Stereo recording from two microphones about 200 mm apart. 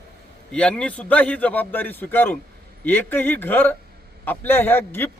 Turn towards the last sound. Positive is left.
turn(degrees=10)  # may be behind; listen again after turning